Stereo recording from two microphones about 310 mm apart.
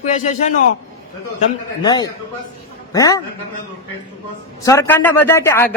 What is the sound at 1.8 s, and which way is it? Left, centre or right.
A man's voice, centre.